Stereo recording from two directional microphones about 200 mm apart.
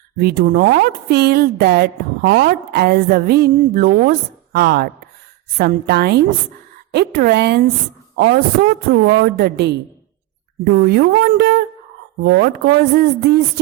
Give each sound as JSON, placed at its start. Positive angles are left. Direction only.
{"t": 0.2, "sound": "speech", "side_deg": -50}